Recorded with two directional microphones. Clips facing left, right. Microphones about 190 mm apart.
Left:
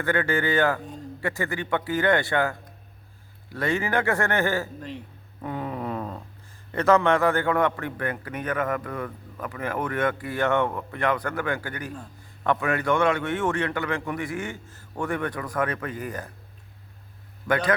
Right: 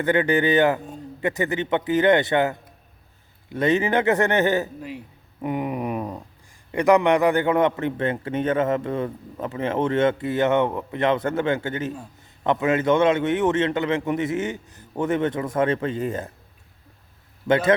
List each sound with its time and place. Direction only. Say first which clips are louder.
0.0 s a man's voice: right 5 dB; 20° right (ahead or behind)
5.4 s a sound: right 5 dB; 15° right (ahead or behind)
6.7 s a man's voice: right 3 dB; 15° right (ahead or behind)